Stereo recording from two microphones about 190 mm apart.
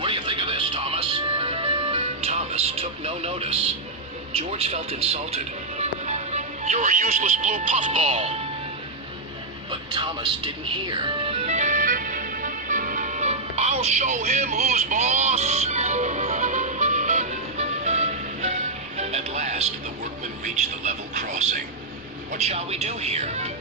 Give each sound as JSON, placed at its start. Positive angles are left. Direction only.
{"t": 0.0, "sound": "music", "side_deg": -30}
{"t": 4.3, "sound": "speech", "side_deg": -30}
{"t": 9.9, "sound": "music", "side_deg": -25}
{"t": 22.3, "sound": "speech", "side_deg": -35}